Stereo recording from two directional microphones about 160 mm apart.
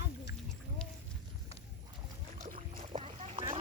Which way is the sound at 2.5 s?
35° right (ahead or behind).